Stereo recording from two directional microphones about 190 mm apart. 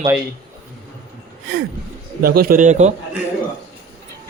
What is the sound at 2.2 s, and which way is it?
Speech, 55° right (ahead or behind).